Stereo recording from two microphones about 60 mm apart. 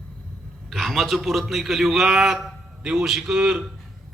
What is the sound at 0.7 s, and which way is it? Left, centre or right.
A man's voice, centre.